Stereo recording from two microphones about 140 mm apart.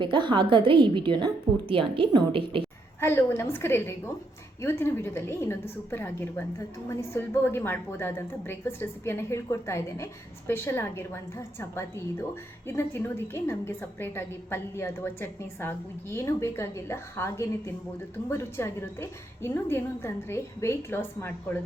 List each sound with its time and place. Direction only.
0.0 s a woman's voice: 35° right (ahead or behind)
3.0 s a woman's voice: 15° left (ahead or behind)